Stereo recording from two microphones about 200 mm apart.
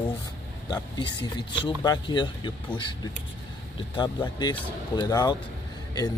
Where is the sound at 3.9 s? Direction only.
20° left (ahead or behind).